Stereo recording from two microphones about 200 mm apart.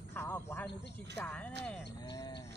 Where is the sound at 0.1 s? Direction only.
10° left (ahead or behind).